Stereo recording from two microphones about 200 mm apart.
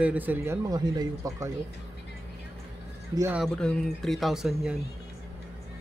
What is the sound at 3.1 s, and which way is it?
Speech, 15° right (ahead or behind).